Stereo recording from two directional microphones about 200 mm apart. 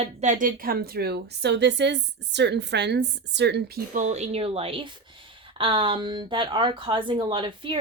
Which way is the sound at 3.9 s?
35° right (ahead or behind).